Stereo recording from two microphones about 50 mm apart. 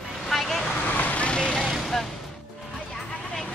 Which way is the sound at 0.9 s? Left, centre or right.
Left.